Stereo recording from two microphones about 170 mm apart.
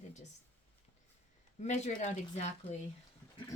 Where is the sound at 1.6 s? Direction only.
40° left (ahead or behind).